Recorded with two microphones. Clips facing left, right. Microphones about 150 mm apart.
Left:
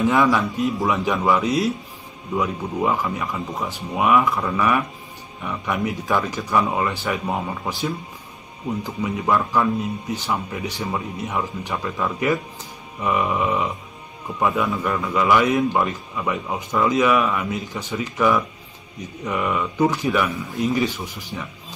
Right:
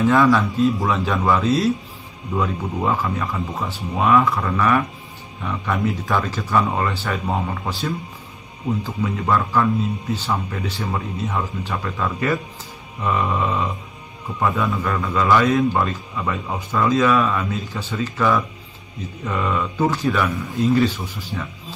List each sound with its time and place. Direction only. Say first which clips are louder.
0.0 s a man's voice: right 2 dB; 20° left (ahead or behind)
8.8 s a man's voice: even; 15° left (ahead or behind)